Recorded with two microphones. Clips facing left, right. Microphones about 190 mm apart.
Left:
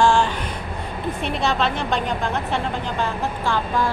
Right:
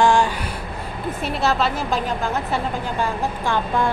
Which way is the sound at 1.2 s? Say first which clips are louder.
Right 1 dB; 5° right (ahead or behind).